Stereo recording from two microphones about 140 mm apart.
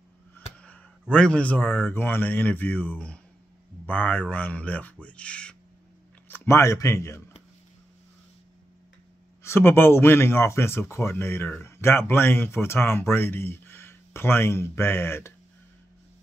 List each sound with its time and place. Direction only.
0.6 s a sound: 10° left (ahead or behind)
1.1 s speech: 10° left (ahead or behind)
9.4 s speech: 15° left (ahead or behind)